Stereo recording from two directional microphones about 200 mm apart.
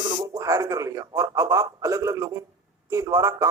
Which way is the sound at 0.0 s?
20° right (ahead or behind).